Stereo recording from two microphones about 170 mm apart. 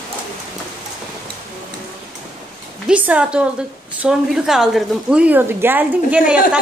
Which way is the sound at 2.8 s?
10° right (ahead or behind).